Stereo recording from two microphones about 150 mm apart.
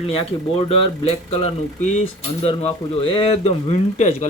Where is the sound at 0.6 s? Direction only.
45° left (ahead or behind).